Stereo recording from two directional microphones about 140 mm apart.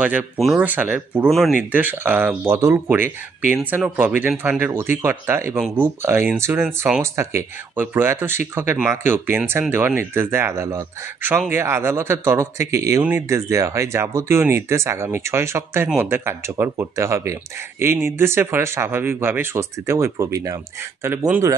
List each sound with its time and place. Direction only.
0.0 s speech: 10° right (ahead or behind)
0.4 s speech: centre (ahead or behind)
0.7 s speech: 10° right (ahead or behind)
1.3 s speech: centre (ahead or behind)
1.6 s speech: 10° right (ahead or behind)